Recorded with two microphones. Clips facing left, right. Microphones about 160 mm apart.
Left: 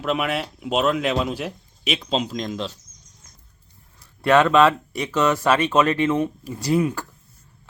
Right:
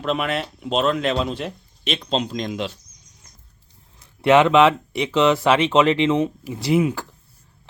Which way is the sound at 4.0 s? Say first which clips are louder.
Right 2 dB; 20° right (ahead or behind).